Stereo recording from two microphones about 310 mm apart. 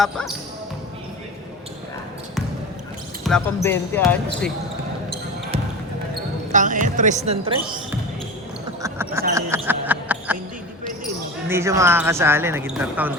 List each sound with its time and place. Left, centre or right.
0.0 s speech: centre
3.2 s speech: centre
6.5 s speech: right
8.8 s a sound: centre
11.4 s speech: centre